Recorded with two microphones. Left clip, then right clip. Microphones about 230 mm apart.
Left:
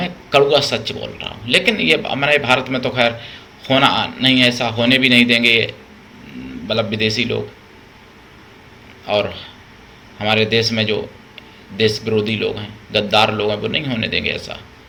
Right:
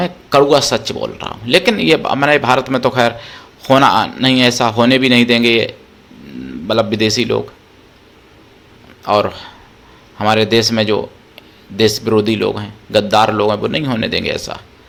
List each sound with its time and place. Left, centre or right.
0.0 s speech: right
9.0 s speech: right